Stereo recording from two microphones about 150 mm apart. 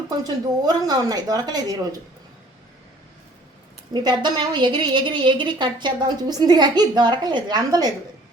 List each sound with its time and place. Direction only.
0.6 s a woman's voice: 25° right (ahead or behind)
3.9 s a woman's voice: 30° right (ahead or behind)